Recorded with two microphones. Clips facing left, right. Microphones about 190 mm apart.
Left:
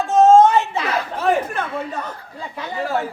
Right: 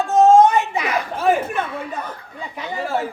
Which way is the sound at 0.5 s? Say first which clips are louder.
Left 1 dB; 15° right (ahead or behind).